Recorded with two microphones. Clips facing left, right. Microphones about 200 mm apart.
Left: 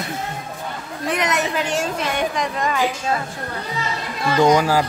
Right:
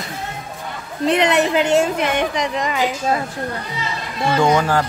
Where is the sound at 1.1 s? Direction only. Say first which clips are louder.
Right 6 dB; 30° right (ahead or behind).